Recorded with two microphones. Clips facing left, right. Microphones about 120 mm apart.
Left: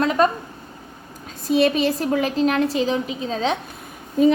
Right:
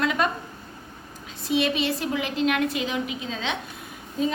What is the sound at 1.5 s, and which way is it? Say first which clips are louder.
A woman's voice: left 6 dB; 40° left (ahead or behind).